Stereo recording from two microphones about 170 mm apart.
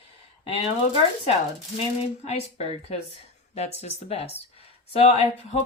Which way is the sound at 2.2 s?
40° left (ahead or behind).